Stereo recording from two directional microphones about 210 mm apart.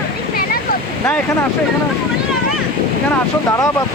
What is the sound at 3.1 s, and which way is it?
Speech, 15° left (ahead or behind).